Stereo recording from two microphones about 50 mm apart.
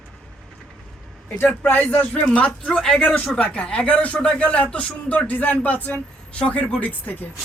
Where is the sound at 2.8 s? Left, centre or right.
Centre.